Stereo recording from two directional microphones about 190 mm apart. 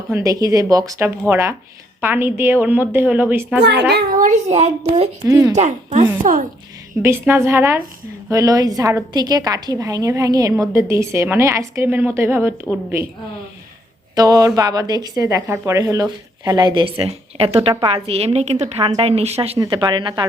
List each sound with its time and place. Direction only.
0.1 s a woman's voice: 15° right (ahead or behind)
3.6 s speech: 65° right (ahead or behind)
3.9 s a child's voice: 45° right (ahead or behind)
5.3 s a woman's voice: 15° right (ahead or behind)
5.5 s a child's voice: 40° right (ahead or behind)
7.0 s a woman's voice: 15° right (ahead or behind)
14.2 s a woman's voice: 20° right (ahead or behind)
19.5 s a woman's voice: 20° right (ahead or behind)